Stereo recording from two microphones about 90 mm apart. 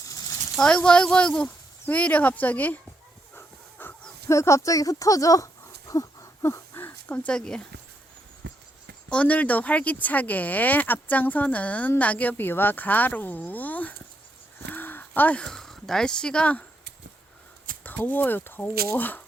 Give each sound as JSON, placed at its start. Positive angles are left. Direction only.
{"t": 0.5, "sound": "speech", "side_deg": 10}
{"t": 3.3, "sound": "dog", "side_deg": 25}
{"t": 4.3, "sound": "speech", "side_deg": 35}
{"t": 5.9, "sound": "a sound", "side_deg": 40}
{"t": 9.0, "sound": "speech", "side_deg": 15}
{"t": 17.8, "sound": "speech", "side_deg": 20}